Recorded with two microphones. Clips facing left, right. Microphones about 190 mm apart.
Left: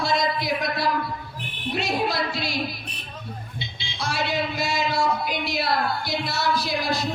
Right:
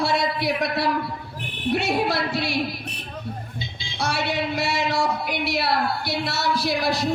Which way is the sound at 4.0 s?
65° right (ahead or behind).